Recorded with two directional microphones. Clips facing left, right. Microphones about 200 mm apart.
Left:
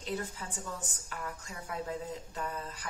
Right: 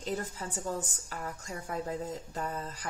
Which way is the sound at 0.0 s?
45° right (ahead or behind).